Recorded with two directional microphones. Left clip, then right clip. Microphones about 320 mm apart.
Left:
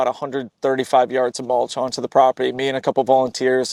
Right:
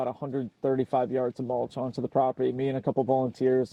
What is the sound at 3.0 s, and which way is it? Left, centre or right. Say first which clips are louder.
Speech: left 10 dB; left.